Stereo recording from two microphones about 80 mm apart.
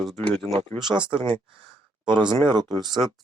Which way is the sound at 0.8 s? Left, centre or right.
Centre.